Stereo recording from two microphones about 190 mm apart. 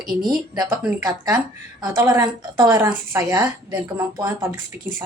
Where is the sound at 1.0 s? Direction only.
20° right (ahead or behind).